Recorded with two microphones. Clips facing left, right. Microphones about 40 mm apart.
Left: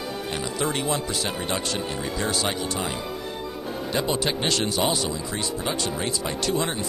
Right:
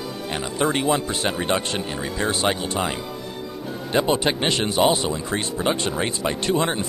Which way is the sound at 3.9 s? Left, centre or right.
Right.